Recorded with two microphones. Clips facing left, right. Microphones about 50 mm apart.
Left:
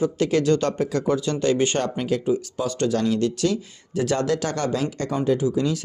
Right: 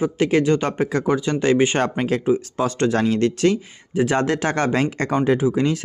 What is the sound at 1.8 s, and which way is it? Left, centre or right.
Speech, right.